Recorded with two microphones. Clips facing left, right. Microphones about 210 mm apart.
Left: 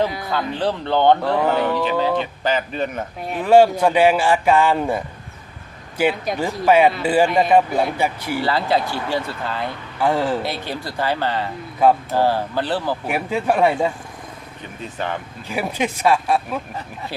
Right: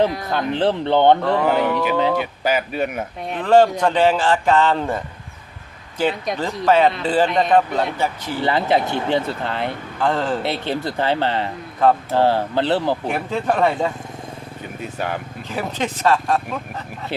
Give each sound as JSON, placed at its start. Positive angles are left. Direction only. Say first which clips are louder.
{"t": 0.3, "sound": "speech", "louder": "right 3 dB", "side_deg": -20}
{"t": 1.2, "sound": "speech", "louder": "right 1 dB", "side_deg": 5}
{"t": 1.5, "sound": "speech", "louder": "right 1 dB", "side_deg": -10}
{"t": 3.2, "sound": "speech", "louder": "left 1 dB", "side_deg": 10}
{"t": 8.4, "sound": "speech", "louder": "right 2 dB", "side_deg": -20}
{"t": 10.0, "sound": "speech", "louder": "left 1 dB", "side_deg": 10}
{"t": 10.4, "sound": "speech", "louder": "right 4 dB", "side_deg": -20}
{"t": 11.8, "sound": "speech", "louder": "left 1 dB", "side_deg": 10}
{"t": 12.1, "sound": "speech", "louder": "right 2 dB", "side_deg": -20}
{"t": 13.1, "sound": "speech", "louder": "left 1 dB", "side_deg": 10}
{"t": 14.8, "sound": "speech", "louder": "even", "side_deg": -5}
{"t": 15.4, "sound": "speech", "louder": "left 2 dB", "side_deg": 10}